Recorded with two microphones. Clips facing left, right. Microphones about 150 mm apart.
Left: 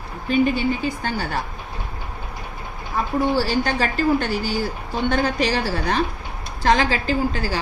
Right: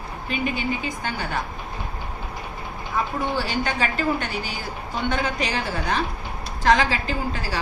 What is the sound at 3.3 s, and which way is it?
A woman's voice, 35° left (ahead or behind).